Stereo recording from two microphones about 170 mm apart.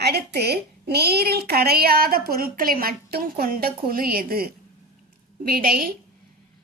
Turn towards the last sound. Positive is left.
turn(degrees=-60)  # may be behind; listen again after turning